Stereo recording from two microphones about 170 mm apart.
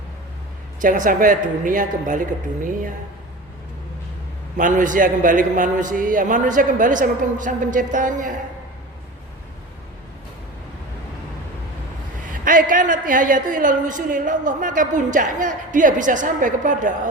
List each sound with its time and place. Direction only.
0.8 s a woman's voice: 50° right (ahead or behind)
4.5 s a woman's voice: 50° right (ahead or behind)
12.3 s a woman's voice: 50° right (ahead or behind)